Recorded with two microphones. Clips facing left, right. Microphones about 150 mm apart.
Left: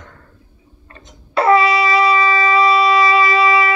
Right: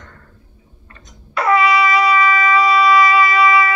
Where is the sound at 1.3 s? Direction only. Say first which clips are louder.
Left 2 dB; 30° left (ahead or behind).